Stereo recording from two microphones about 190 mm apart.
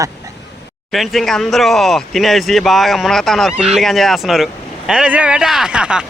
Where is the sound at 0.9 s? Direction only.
Centre (ahead or behind).